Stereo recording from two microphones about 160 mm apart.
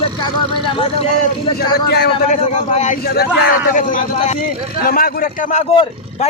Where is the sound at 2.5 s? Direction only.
50° left (ahead or behind).